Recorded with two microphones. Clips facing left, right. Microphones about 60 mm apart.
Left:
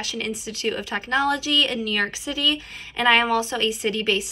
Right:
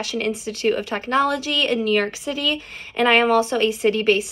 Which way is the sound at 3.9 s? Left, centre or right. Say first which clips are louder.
Right 5 dB; right.